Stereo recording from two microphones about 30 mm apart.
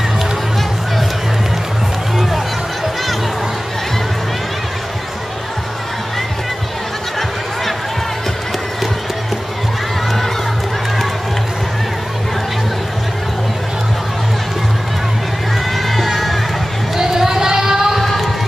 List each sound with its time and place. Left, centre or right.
15.7 s music: centre
16.9 s singing: centre